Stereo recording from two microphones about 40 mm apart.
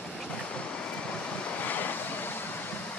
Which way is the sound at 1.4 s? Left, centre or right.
Left.